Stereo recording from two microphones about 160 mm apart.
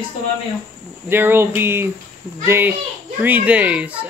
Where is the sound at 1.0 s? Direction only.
15° right (ahead or behind).